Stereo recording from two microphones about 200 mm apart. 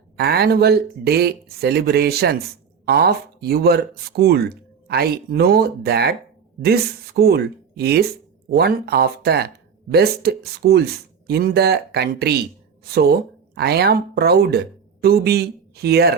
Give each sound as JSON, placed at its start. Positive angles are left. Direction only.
{"t": 0.2, "sound": "speech", "side_deg": -50}